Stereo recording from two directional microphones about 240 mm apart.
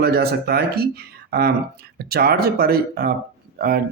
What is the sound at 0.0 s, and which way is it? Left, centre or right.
Speech, right.